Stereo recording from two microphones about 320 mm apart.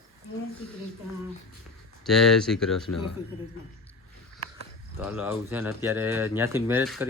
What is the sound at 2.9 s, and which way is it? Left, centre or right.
Speech, left.